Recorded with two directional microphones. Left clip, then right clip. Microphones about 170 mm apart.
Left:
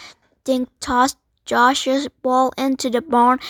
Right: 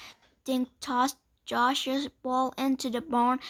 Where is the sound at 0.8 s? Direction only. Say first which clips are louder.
Left 10 dB; 35° left (ahead or behind).